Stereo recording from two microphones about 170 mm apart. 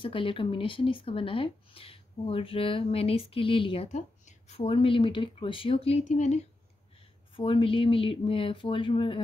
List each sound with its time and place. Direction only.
0.0 s speech: 30° left (ahead or behind)
7.3 s speech: 30° left (ahead or behind)